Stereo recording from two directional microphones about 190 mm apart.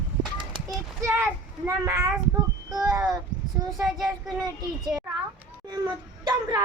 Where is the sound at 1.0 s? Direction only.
10° right (ahead or behind).